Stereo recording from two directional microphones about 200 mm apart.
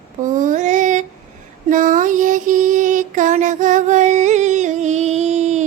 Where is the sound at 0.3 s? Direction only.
40° right (ahead or behind).